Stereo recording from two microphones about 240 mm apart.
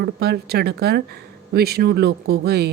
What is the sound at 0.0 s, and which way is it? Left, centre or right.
A woman's voice, right.